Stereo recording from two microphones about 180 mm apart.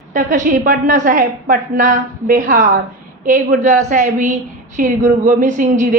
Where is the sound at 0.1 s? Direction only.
45° right (ahead or behind).